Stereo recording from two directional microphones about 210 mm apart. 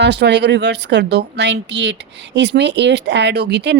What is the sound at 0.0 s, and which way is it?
Speech, 55° right (ahead or behind).